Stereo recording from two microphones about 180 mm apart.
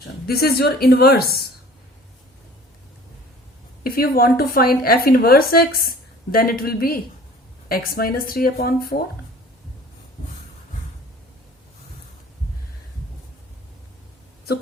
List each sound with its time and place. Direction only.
0.3 s speech: 60° left (ahead or behind)
3.8 s speech: 55° left (ahead or behind)